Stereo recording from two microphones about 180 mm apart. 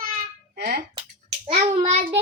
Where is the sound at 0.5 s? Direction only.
60° right (ahead or behind).